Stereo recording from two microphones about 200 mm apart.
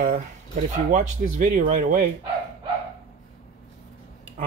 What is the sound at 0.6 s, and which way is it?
Speech, 40° right (ahead or behind).